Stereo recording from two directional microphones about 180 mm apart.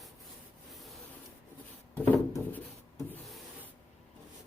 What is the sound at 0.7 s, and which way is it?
Rub, centre (ahead or behind).